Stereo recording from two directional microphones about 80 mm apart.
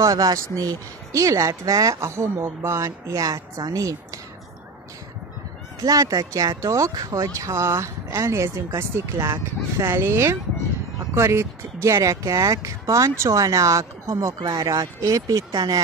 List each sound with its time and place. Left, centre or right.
0.0 s speech: right
5.9 s speech: right